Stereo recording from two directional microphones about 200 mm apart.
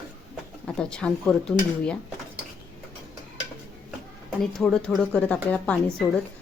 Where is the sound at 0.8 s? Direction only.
5° left (ahead or behind).